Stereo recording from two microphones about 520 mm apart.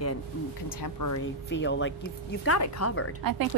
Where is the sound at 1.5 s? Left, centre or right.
Left.